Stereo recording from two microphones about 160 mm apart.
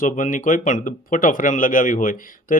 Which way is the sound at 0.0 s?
55° left (ahead or behind).